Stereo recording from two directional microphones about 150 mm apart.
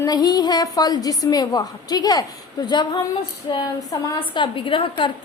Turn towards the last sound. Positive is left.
turn(degrees=35)  # may be behind; listen again after turning